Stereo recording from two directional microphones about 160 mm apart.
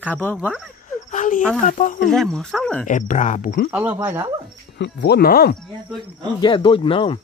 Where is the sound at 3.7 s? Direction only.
15° right (ahead or behind).